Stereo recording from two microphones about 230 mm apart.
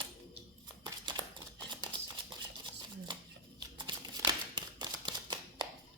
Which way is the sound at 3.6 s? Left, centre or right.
Centre.